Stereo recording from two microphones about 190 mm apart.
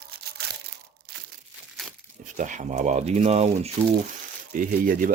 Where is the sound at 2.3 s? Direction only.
40° right (ahead or behind).